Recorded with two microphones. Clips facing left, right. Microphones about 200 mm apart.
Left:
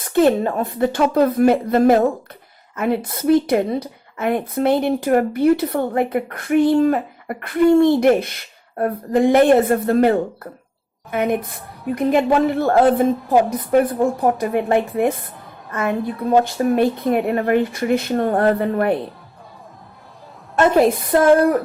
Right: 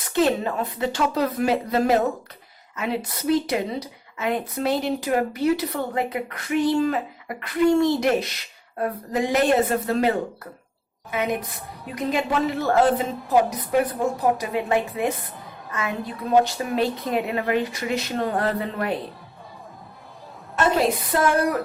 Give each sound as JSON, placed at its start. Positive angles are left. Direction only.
{"t": 0.0, "sound": "a woman's voice", "side_deg": 50}
{"t": 20.9, "sound": "speech", "side_deg": 55}